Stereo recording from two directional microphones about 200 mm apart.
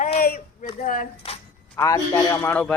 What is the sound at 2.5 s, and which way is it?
Speech, 5° left (ahead or behind).